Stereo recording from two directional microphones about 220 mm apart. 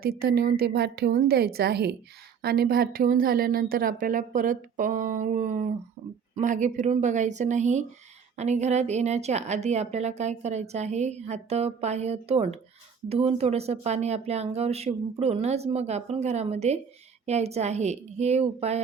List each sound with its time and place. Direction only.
0.0 s a woman's voice: 45° right (ahead or behind)